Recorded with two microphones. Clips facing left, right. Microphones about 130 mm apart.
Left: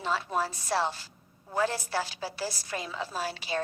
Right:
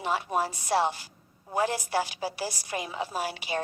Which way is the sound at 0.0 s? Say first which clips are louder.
Right 2 dB; 15° right (ahead or behind).